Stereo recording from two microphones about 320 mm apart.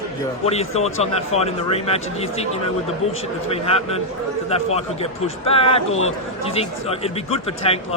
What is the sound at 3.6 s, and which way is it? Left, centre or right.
Speech, centre.